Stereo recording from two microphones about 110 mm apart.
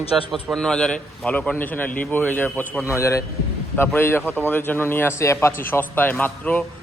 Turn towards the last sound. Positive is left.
turn(degrees=15)  # may be behind; listen again after turning